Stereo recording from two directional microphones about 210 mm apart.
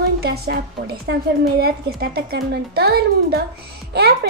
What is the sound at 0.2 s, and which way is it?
A woman's voice, 50° right (ahead or behind).